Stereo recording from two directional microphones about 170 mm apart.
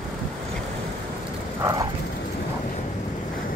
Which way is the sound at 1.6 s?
20° right (ahead or behind).